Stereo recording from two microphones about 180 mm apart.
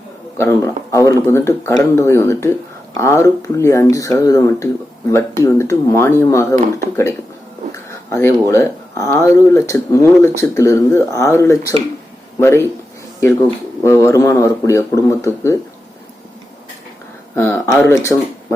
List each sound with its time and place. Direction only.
0.3 s speech: 15° left (ahead or behind)
13.8 s speech: 15° left (ahead or behind)
17.3 s speech: 15° left (ahead or behind)